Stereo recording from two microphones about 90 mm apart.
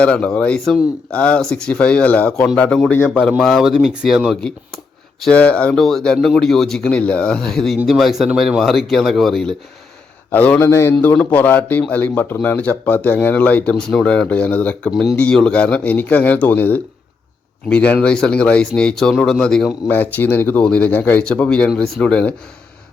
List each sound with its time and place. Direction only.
0.0 s speech: 15° left (ahead or behind)
3.4 s speech: centre (ahead or behind)
5.3 s speech: 15° left (ahead or behind)
10.3 s speech: 15° left (ahead or behind)
10.6 s a man's voice: 30° left (ahead or behind)
11.2 s speech: 20° left (ahead or behind)
19.9 s speech: 20° left (ahead or behind)